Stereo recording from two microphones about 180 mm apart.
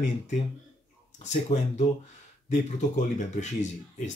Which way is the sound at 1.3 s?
40° left (ahead or behind).